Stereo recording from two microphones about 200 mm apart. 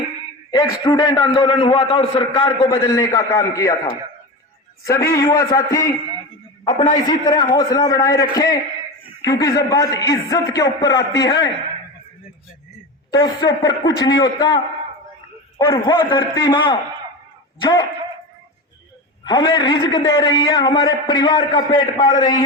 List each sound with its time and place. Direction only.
0.5 s a man's voice: 20° left (ahead or behind)
4.8 s a man's voice: 15° left (ahead or behind)
13.1 s a man's voice: 20° left (ahead or behind)
19.2 s a man's voice: 20° left (ahead or behind)